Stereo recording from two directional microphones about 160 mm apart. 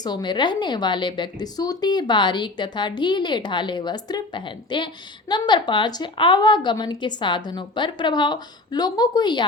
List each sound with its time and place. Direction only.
0.0 s a woman's voice: 25° left (ahead or behind)